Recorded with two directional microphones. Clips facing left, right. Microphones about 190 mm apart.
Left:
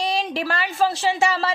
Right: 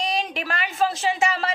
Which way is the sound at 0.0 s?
35° left (ahead or behind).